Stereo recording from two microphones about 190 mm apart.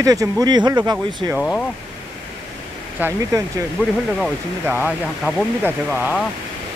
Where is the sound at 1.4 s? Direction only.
5° left (ahead or behind).